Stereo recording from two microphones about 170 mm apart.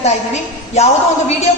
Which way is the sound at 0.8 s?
40° left (ahead or behind).